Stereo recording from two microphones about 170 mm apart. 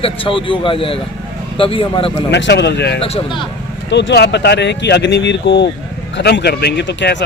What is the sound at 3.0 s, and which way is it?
Speech, 35° left (ahead or behind).